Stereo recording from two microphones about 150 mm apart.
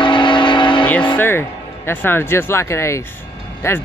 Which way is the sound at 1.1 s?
15° left (ahead or behind).